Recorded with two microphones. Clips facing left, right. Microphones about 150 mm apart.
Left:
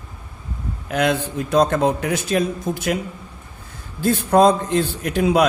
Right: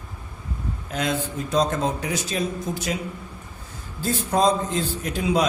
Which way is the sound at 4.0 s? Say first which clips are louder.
Left 7 dB; 60° left (ahead or behind).